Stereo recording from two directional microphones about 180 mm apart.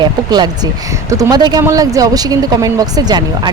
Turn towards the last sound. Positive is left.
turn(degrees=-20)  # may be behind; listen again after turning